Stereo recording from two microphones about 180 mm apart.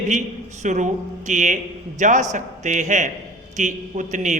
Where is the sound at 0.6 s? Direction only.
40° right (ahead or behind).